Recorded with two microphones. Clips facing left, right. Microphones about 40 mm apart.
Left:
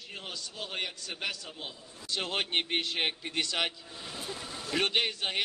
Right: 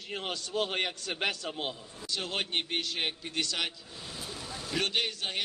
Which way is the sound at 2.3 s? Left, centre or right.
Left.